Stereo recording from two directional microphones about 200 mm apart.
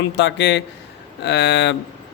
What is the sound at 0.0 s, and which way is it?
Speech, 60° left (ahead or behind).